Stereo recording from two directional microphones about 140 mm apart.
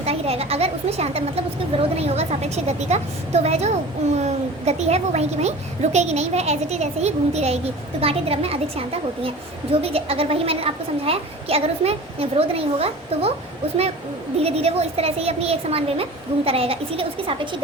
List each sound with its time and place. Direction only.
0.0 s a woman's voice: 45° right (ahead or behind)
9.8 s a woman's voice: 45° right (ahead or behind)
14.3 s a woman's voice: 45° right (ahead or behind)